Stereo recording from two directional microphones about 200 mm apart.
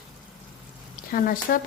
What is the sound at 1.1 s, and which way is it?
Speech, 45° left (ahead or behind).